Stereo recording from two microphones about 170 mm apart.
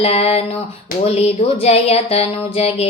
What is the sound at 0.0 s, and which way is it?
Music, 40° left (ahead or behind).